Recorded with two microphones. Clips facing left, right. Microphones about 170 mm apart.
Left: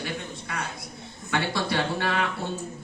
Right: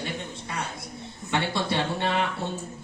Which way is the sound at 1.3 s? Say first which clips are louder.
Even; 25° right (ahead or behind).